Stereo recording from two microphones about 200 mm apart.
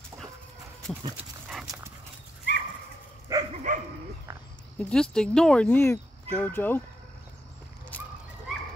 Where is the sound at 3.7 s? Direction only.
40° right (ahead or behind).